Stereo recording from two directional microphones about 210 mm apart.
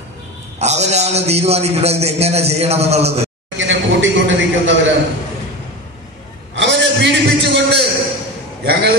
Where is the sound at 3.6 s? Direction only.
60° right (ahead or behind).